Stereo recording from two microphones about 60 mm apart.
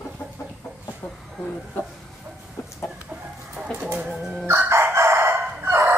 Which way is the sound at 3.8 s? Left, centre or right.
Right.